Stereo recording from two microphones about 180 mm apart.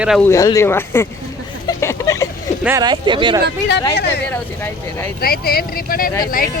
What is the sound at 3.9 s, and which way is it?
Speech, 65° left (ahead or behind).